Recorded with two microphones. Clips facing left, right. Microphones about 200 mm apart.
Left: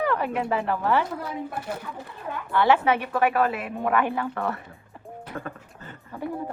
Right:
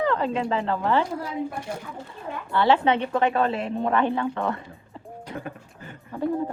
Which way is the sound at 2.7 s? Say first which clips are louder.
Right 1 dB; 20° right (ahead or behind).